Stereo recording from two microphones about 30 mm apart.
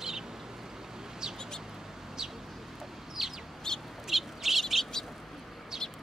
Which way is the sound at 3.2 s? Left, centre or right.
Centre.